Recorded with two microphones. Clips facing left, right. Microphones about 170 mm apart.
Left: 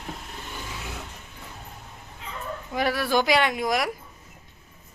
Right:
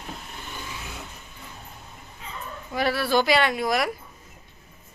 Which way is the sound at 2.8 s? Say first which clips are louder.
Right 1 dB; 15° left (ahead or behind).